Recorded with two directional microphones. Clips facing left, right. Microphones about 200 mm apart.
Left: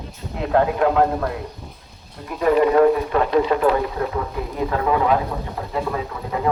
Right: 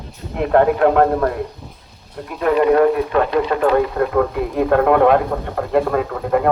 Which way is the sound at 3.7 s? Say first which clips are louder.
Right 7 dB; 60° right (ahead or behind).